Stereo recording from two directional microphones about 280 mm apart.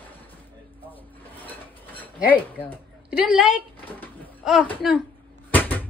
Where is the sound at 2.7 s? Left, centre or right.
Centre.